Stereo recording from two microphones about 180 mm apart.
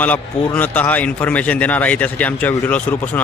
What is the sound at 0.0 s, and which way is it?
A man's voice, 10° left (ahead or behind).